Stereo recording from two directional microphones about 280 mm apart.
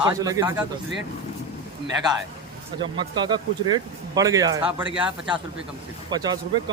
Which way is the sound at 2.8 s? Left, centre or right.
Centre.